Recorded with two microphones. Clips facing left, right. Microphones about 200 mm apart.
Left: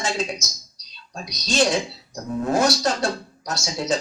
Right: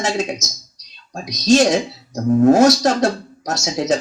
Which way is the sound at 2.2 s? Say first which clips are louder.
Right 10 dB; 45° right (ahead or behind).